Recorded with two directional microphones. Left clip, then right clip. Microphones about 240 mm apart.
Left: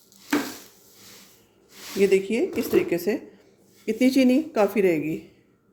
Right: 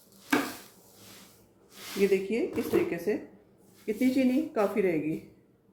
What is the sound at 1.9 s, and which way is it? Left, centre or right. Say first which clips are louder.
Speech: left 6 dB; left.